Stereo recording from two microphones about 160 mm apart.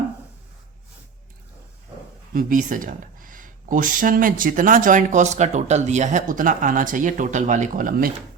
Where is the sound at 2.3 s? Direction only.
55° right (ahead or behind).